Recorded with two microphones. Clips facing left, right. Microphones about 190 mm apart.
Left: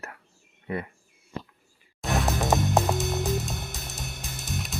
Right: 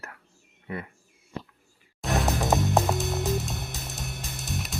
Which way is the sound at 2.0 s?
Centre (ahead or behind).